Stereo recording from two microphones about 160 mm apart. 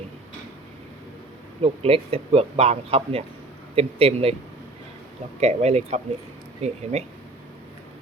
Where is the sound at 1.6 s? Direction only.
35° right (ahead or behind).